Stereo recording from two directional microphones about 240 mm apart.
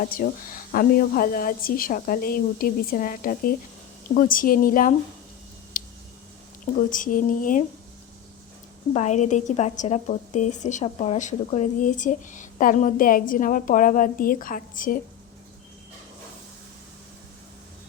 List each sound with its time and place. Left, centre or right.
0.0 s a woman's voice: left
5.7 s a sound: left
6.9 s a woman's voice: left
8.9 s a woman's voice: left